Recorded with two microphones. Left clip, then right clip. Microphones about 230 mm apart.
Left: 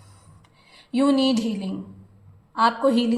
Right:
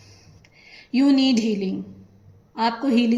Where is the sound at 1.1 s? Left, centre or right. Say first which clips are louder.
Right 2 dB; centre.